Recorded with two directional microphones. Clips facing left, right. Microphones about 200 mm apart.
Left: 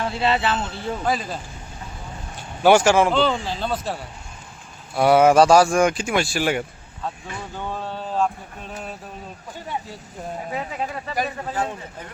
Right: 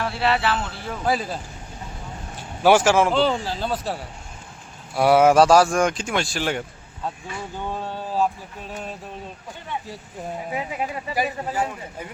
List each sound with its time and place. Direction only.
0.0 s speech: 20° left (ahead or behind)
1.0 s speech: 5° right (ahead or behind)
2.6 s speech: centre (ahead or behind)
7.5 s speech: 15° right (ahead or behind); by 9.0 s 5° left (ahead or behind)
10.5 s speech: 10° right (ahead or behind)